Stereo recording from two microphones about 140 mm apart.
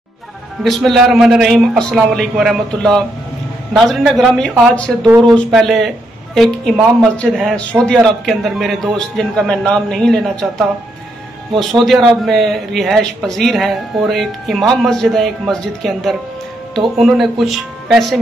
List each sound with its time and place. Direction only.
0.7 s a man's voice: centre (ahead or behind)
11.7 s a man's voice: centre (ahead or behind)